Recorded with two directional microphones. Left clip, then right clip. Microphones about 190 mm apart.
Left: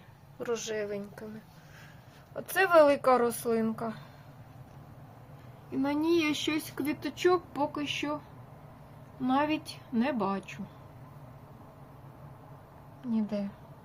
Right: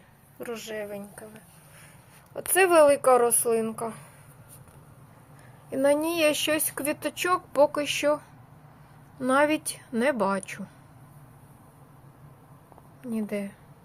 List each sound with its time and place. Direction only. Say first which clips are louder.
0.3 s speech: left 1 dB; 15° left (ahead or behind)
2.3 s speech: right 3 dB; 5° right (ahead or behind)
5.7 s speech: right 5 dB; 40° right (ahead or behind)
9.2 s speech: right 6 dB; 45° right (ahead or behind)